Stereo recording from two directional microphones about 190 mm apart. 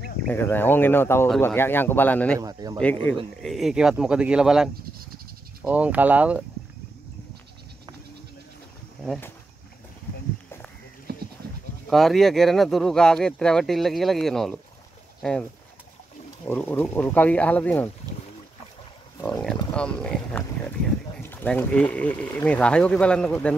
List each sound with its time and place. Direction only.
0.3 s speech: 10° left (ahead or behind)
2.3 s speech: 20° right (ahead or behind)
2.8 s speech: 10° left (ahead or behind); by 6.4 s 5° right (ahead or behind)
11.1 s sheep: 55° right (ahead or behind)
11.9 s speech: centre (ahead or behind)
16.4 s speech: 10° left (ahead or behind)
19.2 s speech: 5° left (ahead or behind)